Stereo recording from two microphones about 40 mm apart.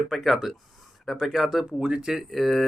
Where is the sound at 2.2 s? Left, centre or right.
Centre.